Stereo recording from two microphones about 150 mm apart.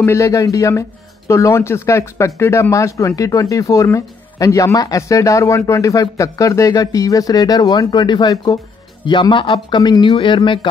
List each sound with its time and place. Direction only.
0.0 s speech: 20° left (ahead or behind)